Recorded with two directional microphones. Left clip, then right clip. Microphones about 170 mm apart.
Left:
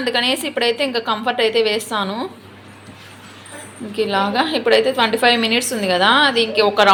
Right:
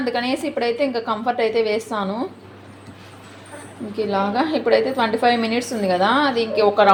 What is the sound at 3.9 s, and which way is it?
A woman's voice, 5° right (ahead or behind).